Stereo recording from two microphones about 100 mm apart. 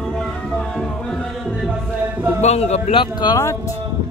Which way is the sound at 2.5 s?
90° left.